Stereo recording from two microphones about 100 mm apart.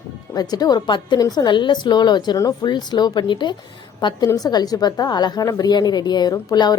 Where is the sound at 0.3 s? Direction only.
40° left (ahead or behind).